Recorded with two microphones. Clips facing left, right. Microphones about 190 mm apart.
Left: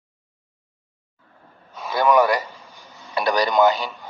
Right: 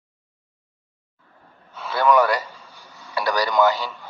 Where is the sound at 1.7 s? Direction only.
15° left (ahead or behind).